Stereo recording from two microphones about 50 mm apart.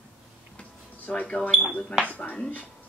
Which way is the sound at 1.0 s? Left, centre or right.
Left.